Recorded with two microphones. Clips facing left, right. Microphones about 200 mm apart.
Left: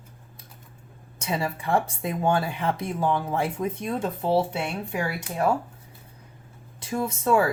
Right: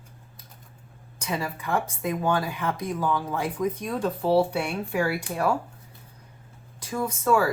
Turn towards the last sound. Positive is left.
turn(degrees=25)  # may be behind; listen again after turning